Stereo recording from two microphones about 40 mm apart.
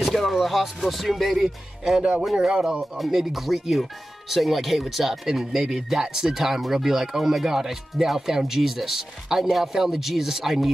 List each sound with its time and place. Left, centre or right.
0.0 s speech: centre
2.0 s speech: right
2.8 s speech: centre